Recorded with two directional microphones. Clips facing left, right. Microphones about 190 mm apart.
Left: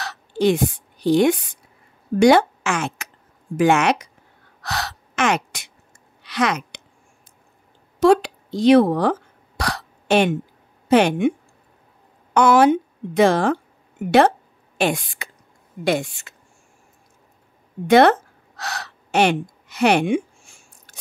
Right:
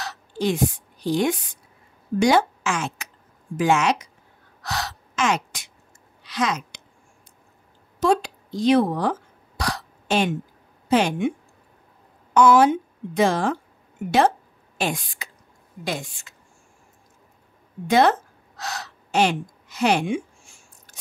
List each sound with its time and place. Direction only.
0.0 s a sound: 70° left (ahead or behind)
1.0 s a woman's voice: 70° left (ahead or behind)
4.6 s gasp: 65° left (ahead or behind)
6.2 s speech: 70° left (ahead or behind)
8.0 s speech: 75° left (ahead or behind)
9.6 s hiccup: 65° left (ahead or behind)
10.9 s speech: 65° left (ahead or behind)
12.4 s a woman's voice: 70° left (ahead or behind)
14.8 s a woman's voice: 65° left (ahead or behind)
17.8 s a woman's voice: 70° left (ahead or behind)